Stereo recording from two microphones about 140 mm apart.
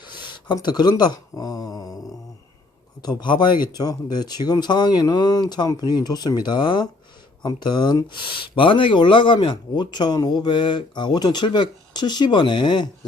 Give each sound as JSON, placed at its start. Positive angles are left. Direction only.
{"t": 0.0, "sound": "speech", "side_deg": 35}
{"t": 3.0, "sound": "speech", "side_deg": 30}